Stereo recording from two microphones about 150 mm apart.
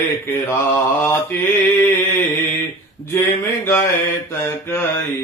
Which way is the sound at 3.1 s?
15° left (ahead or behind).